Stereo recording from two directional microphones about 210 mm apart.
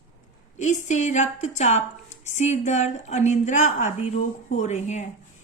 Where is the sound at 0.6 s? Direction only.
35° left (ahead or behind).